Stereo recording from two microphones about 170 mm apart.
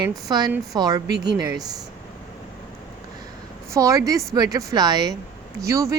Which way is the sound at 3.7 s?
20° right (ahead or behind).